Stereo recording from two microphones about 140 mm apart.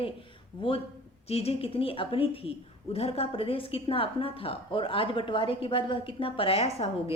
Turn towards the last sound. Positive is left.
turn(degrees=45)  # may be behind; listen again after turning